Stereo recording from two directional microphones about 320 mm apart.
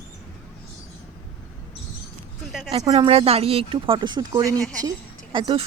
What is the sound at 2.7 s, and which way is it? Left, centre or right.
Speech, centre.